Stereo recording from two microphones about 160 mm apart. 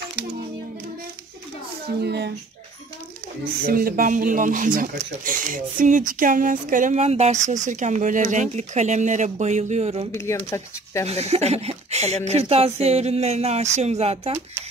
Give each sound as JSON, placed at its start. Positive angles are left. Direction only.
{"t": 2.0, "sound": "speech", "side_deg": -90}
{"t": 3.6, "sound": "speech", "side_deg": -65}
{"t": 10.1, "sound": "speech", "side_deg": 15}
{"t": 11.1, "sound": "speech", "side_deg": -40}